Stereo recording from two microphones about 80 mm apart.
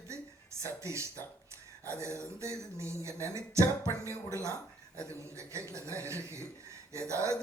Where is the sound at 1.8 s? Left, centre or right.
Right.